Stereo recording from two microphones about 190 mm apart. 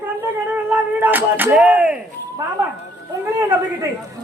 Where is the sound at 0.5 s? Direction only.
10° right (ahead or behind).